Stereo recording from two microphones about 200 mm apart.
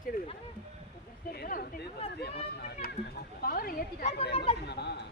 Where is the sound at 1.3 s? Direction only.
45° left (ahead or behind).